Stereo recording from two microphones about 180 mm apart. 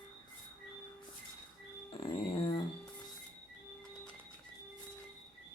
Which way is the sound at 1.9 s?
30° left (ahead or behind).